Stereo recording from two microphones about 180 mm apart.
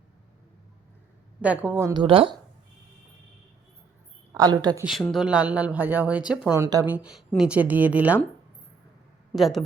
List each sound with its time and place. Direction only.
1.4 s speech: 10° right (ahead or behind)
1.9 s speech: 30° right (ahead or behind)
4.4 s speech: 20° right (ahead or behind)
5.1 s speech: 5° right (ahead or behind)
6.5 s a woman's voice: 15° right (ahead or behind)
9.3 s a woman's voice: centre (ahead or behind)